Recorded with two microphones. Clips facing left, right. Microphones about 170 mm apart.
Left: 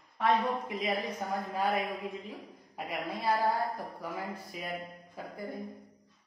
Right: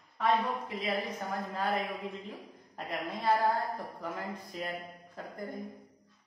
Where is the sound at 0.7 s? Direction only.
15° left (ahead or behind).